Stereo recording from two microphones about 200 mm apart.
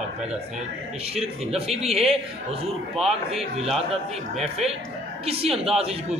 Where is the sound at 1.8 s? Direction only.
Centre (ahead or behind).